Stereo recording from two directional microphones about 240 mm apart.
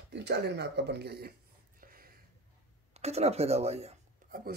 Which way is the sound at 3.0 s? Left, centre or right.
Right.